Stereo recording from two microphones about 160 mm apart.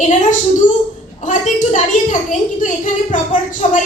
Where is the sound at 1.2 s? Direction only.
50° left (ahead or behind).